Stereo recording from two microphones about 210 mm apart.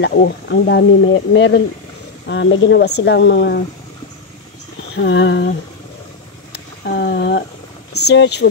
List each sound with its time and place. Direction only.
0.0 s speech: 55° left (ahead or behind)
4.9 s speech: 60° left (ahead or behind)
6.5 s speech: 50° left (ahead or behind)